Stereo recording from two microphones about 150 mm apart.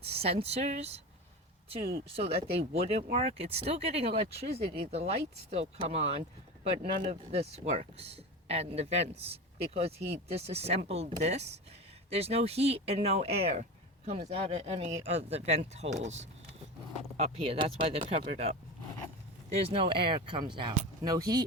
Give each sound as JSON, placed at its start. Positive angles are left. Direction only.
{"t": 0.0, "sound": "speech", "side_deg": -40}
{"t": 2.1, "sound": "speech", "side_deg": -40}
{"t": 19.7, "sound": "speech", "side_deg": -35}